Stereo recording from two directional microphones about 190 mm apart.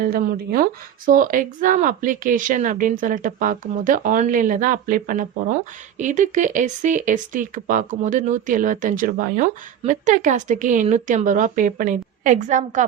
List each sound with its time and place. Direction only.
0.0 s speech: 50° right (ahead or behind)